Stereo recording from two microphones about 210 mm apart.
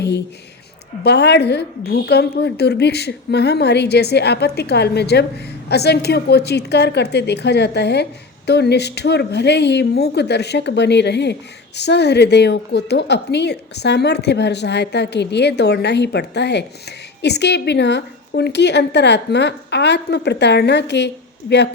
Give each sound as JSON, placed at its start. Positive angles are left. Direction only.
{"t": 1.0, "sound": "a woman's voice", "side_deg": 50}